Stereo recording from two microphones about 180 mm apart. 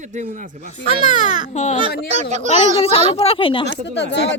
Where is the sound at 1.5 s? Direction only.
40° left (ahead or behind).